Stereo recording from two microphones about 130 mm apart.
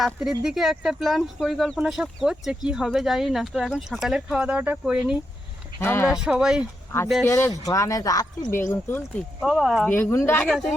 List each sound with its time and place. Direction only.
0.0 s speech: 5° right (ahead or behind)
5.8 s speech: 20° left (ahead or behind)
6.1 s speech: 5° right (ahead or behind)
7.3 s speech: 25° left (ahead or behind)
9.4 s speech: 5° right (ahead or behind)
9.9 s speech: 15° left (ahead or behind)